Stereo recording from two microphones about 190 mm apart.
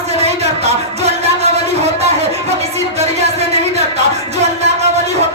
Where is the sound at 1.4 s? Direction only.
35° right (ahead or behind).